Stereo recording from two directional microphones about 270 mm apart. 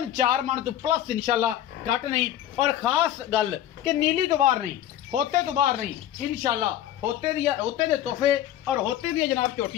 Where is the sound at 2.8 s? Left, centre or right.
Centre.